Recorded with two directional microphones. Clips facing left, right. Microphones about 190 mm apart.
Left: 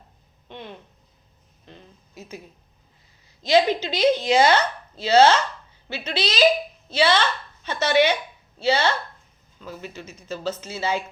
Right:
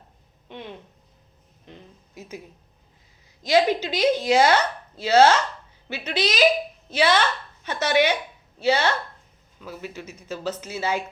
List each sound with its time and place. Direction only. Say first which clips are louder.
0.4 s speech: right 1 dB; 10° right (ahead or behind)
1.6 s a sound: right 1 dB; 15° right (ahead or behind)
3.4 s a woman's voice: left 1 dB; 10° right (ahead or behind)